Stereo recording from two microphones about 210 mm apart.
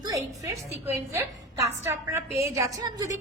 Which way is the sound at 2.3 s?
30° left (ahead or behind).